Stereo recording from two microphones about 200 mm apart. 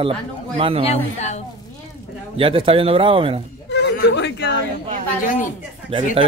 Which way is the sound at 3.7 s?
60° left (ahead or behind).